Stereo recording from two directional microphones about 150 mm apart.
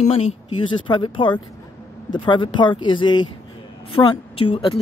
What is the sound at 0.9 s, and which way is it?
Speech, 30° left (ahead or behind).